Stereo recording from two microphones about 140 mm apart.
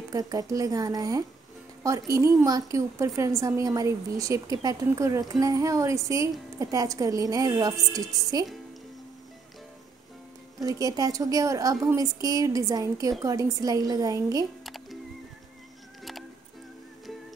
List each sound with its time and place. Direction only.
0.1 s a woman's voice: 25° right (ahead or behind)
10.6 s a woman's voice: 25° right (ahead or behind)
14.6 s music: centre (ahead or behind)
16.0 s music: centre (ahead or behind)